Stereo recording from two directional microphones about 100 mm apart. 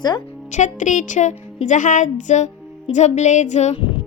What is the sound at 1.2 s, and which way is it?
Speech, 90° left.